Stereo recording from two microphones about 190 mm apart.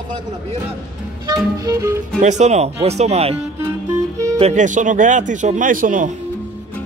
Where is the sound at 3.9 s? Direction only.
15° right (ahead or behind).